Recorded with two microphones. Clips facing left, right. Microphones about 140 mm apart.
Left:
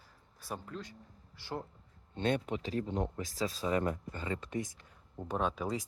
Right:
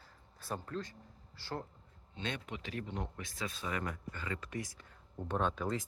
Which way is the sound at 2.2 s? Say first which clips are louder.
Left 9 dB; 50° left (ahead or behind).